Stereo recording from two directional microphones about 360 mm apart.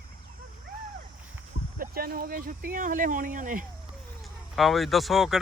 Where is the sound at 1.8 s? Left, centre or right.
Right.